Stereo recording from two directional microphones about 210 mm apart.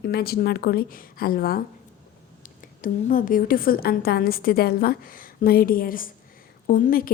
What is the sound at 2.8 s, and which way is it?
A woman's voice, 40° left (ahead or behind).